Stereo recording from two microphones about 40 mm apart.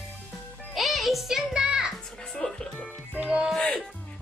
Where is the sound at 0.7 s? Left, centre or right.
Centre.